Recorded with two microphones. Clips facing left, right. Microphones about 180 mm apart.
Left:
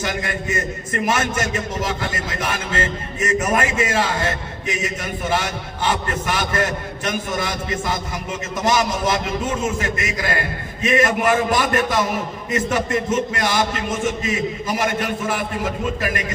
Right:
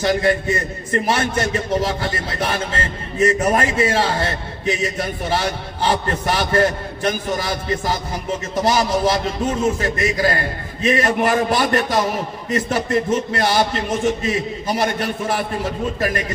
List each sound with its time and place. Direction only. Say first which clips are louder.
0.0 s a man's voice: right 8 dB; 35° right (ahead or behind)